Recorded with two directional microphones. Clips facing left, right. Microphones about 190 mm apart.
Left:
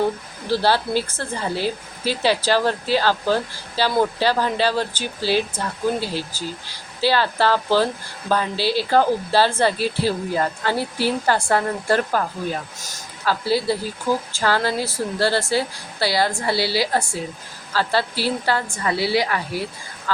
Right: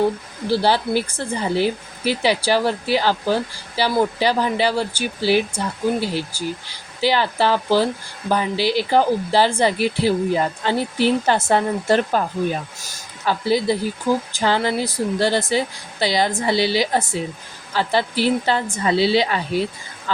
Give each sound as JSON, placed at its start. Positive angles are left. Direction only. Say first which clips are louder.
{"t": 0.5, "sound": "speech", "louder": "right 1 dB", "side_deg": -15}